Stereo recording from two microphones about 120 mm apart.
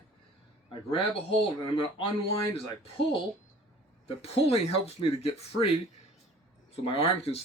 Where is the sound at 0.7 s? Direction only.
45° left (ahead or behind).